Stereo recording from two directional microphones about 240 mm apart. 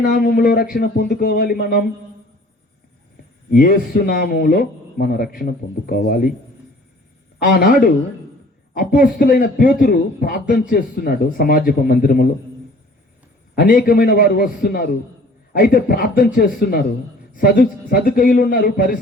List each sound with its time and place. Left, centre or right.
0.0 s a man's voice: left
3.5 s a man's voice: left
7.3 s a man's voice: left
13.6 s a man's voice: left